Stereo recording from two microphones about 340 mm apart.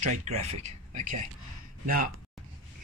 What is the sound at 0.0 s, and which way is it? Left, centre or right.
Speech, right.